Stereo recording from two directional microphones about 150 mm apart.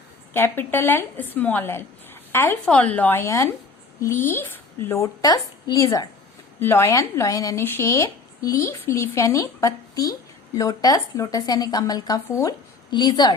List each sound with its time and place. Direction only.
0.3 s a woman's voice: 15° left (ahead or behind)